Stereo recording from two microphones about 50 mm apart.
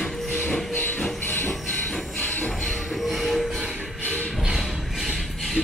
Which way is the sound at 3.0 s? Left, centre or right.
Centre.